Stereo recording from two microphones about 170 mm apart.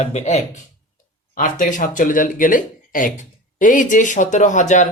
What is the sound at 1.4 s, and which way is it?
Speech, 50° left (ahead or behind).